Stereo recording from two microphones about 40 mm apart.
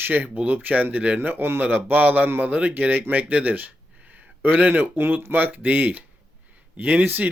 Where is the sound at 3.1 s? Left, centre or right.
Right.